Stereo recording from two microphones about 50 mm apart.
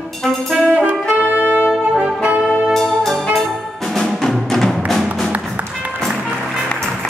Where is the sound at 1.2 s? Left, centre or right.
Right.